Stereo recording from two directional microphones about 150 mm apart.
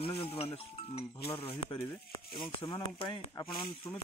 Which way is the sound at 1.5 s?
35° left (ahead or behind).